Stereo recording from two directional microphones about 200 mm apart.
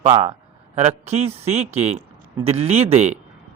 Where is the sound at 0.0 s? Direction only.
30° right (ahead or behind).